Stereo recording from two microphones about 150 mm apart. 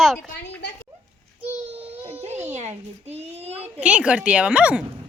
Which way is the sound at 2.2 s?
50° right (ahead or behind).